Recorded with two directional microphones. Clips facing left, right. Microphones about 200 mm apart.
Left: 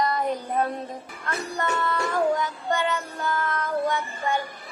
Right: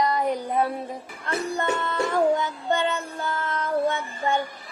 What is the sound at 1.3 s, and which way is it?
Music, 25° right (ahead or behind).